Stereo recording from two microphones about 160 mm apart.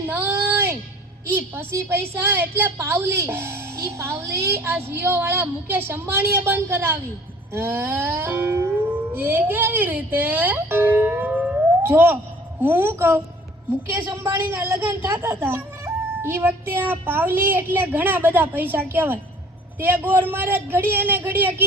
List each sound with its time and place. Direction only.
0.1 s music: 15° right (ahead or behind)
1.3 s a woman's voice: 15° right (ahead or behind)
7.5 s music: 15° right (ahead or behind)
13.9 s a woman's voice: 20° right (ahead or behind)